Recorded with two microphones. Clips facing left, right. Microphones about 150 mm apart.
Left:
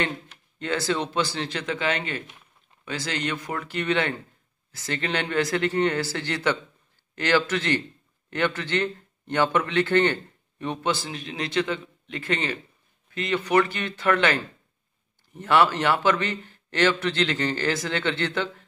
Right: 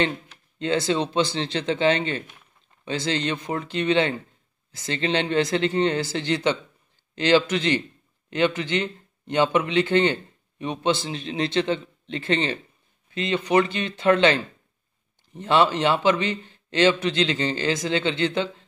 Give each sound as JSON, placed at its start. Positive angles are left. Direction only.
{"t": 0.6, "sound": "a man's voice", "side_deg": -20}